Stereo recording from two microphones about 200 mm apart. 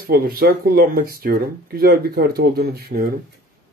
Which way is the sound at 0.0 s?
50° right (ahead or behind).